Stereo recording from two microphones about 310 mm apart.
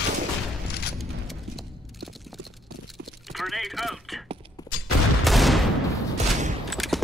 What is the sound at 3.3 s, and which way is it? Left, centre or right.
Speech, centre.